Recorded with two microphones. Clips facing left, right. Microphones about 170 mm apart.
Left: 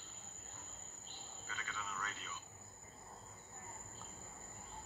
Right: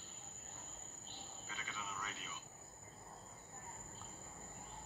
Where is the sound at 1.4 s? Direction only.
15° right (ahead or behind).